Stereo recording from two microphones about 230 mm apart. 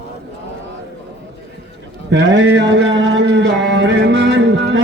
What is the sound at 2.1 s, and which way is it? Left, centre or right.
Mantra, right.